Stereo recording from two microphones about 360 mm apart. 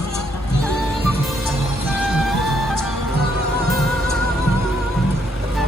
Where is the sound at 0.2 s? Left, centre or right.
Centre.